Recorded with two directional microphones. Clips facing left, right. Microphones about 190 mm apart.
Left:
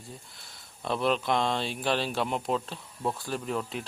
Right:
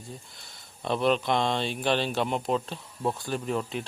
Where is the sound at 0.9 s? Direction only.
Centre (ahead or behind).